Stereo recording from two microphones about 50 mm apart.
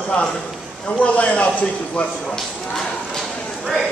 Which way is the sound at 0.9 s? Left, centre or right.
Left.